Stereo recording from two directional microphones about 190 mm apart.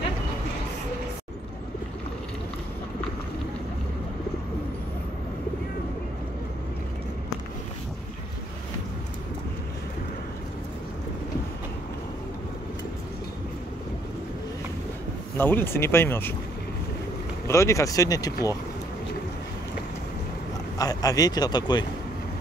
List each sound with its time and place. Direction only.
15.3 s speech: 10° left (ahead or behind)
17.5 s speech: 15° left (ahead or behind)
20.7 s a man's voice: 20° left (ahead or behind)